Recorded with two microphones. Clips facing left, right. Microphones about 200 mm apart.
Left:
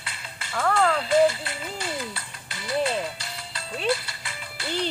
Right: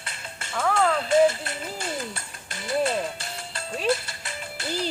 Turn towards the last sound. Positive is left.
turn(degrees=-45)  # may be behind; listen again after turning